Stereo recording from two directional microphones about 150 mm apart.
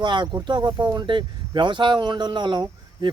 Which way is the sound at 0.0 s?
30° right (ahead or behind).